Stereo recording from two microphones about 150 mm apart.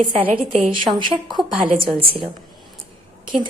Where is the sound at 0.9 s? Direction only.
30° right (ahead or behind).